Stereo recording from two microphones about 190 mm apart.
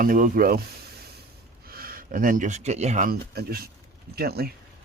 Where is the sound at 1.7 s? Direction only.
50° right (ahead or behind).